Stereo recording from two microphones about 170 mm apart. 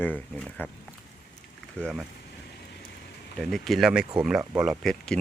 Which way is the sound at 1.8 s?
5° left (ahead or behind).